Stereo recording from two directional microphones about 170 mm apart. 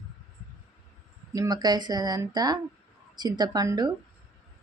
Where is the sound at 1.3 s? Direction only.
20° right (ahead or behind).